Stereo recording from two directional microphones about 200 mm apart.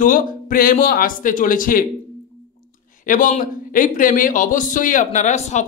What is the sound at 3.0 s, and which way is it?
Speech, 40° left (ahead or behind).